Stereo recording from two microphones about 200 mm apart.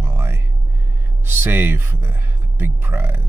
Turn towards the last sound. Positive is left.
turn(degrees=-10)  # may be behind; listen again after turning